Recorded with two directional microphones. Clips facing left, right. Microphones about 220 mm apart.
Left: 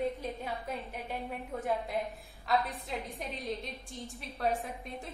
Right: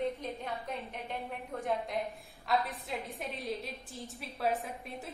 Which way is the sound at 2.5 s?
Centre (ahead or behind).